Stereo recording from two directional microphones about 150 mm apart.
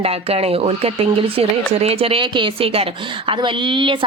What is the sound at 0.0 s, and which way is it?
Speech, 40° right (ahead or behind).